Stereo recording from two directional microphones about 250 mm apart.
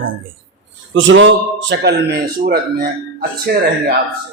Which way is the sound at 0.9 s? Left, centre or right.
Right.